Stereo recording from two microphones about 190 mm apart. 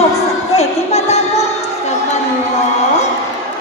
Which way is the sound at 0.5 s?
35° left (ahead or behind).